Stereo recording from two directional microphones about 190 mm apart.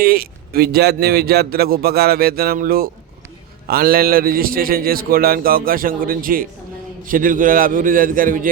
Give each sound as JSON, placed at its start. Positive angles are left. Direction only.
{"t": 0.0, "sound": "speech", "side_deg": -50}